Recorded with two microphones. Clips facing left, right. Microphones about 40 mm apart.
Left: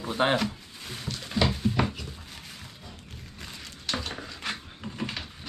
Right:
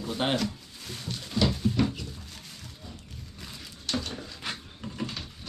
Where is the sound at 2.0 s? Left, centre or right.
Centre.